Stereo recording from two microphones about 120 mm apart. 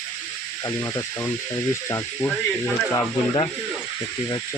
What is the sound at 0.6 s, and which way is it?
Speech, 25° left (ahead or behind).